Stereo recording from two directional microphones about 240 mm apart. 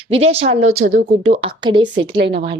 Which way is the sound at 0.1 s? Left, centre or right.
Right.